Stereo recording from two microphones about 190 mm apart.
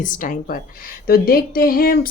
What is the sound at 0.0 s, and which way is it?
A woman's voice, 45° left (ahead or behind).